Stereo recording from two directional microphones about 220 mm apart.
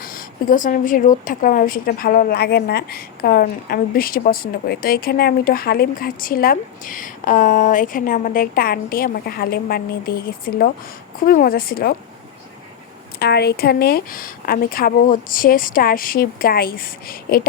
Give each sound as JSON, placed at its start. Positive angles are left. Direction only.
{"t": 0.0, "sound": "a woman's voice", "side_deg": 40}
{"t": 13.1, "sound": "a woman's voice", "side_deg": 50}